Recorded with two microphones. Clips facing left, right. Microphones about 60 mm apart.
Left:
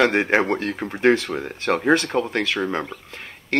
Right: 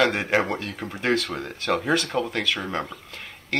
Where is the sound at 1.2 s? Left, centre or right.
Centre.